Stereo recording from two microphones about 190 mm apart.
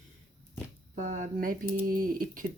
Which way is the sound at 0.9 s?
40° right (ahead or behind).